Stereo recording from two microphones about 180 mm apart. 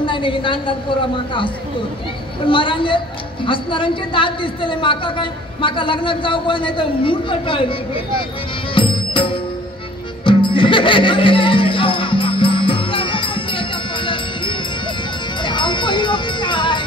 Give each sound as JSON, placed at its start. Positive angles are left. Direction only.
{"t": 0.0, "sound": "a woman's voice", "side_deg": 25}
{"t": 8.7, "sound": "music", "side_deg": 25}